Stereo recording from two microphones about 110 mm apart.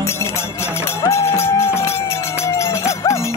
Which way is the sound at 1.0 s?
25° left (ahead or behind).